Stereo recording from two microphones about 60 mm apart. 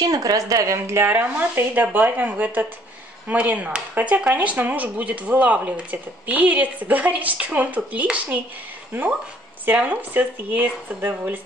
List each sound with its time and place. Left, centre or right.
0.0 s speech: right
0.8 s speech: right
1.1 s speech: right
8.9 s speech: right